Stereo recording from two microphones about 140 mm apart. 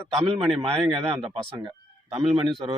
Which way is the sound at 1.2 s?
35° right (ahead or behind).